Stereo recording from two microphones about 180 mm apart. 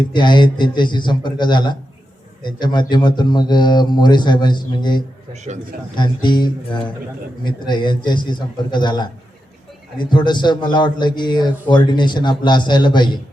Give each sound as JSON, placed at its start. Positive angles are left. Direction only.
{"t": 0.1, "sound": "a man's voice", "side_deg": 25}
{"t": 5.3, "sound": "a man's voice", "side_deg": -40}
{"t": 6.0, "sound": "a man's voice", "side_deg": 25}